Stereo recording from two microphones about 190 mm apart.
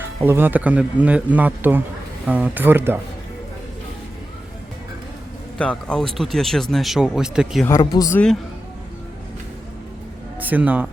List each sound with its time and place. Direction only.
0.0 s speech: 10° right (ahead or behind)
5.5 s speech: 5° left (ahead or behind)
7.6 s speech: 20° left (ahead or behind)
10.4 s speech: 10° right (ahead or behind)